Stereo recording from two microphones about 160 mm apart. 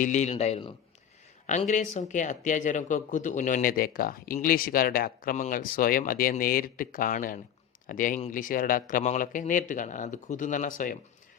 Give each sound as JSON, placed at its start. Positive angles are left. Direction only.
{"t": 0.0, "sound": "speech", "side_deg": 50}